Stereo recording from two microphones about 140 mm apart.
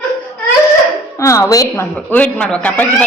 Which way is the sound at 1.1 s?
20° left (ahead or behind).